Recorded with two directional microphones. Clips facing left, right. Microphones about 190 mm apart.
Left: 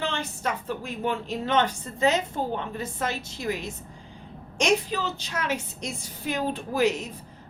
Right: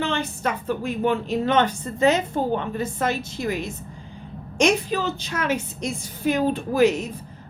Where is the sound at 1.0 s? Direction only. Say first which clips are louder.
Right 6 dB; 60° right (ahead or behind).